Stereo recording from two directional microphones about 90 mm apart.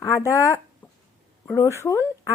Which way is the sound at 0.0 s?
35° left (ahead or behind).